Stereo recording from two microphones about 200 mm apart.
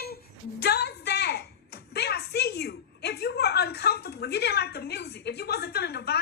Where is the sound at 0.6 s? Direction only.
55° left (ahead or behind).